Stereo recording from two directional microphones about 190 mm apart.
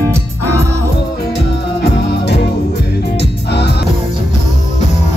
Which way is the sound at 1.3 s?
60° left (ahead or behind).